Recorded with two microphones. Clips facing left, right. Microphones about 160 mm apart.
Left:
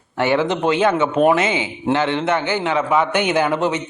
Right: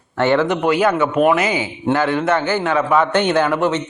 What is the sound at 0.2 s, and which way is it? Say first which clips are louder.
A man's voice: right 2 dB; 15° left (ahead or behind).